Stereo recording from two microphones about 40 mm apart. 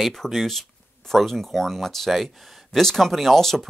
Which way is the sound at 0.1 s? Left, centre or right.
Centre.